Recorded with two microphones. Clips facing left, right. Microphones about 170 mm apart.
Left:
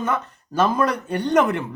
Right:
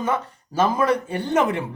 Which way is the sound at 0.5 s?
10° right (ahead or behind).